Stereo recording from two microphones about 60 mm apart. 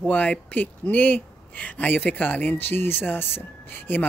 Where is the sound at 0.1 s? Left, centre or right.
Left.